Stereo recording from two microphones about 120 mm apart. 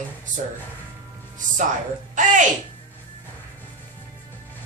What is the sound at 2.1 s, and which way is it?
Speech, 90° right.